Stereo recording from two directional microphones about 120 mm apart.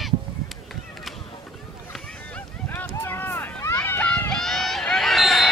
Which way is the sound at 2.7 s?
20° left (ahead or behind).